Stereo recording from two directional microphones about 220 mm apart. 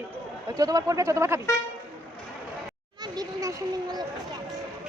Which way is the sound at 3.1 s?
15° right (ahead or behind).